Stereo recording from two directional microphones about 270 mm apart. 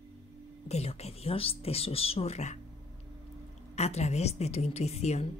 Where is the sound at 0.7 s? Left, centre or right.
Left.